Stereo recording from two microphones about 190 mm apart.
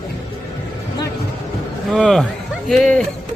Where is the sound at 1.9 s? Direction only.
Centre (ahead or behind).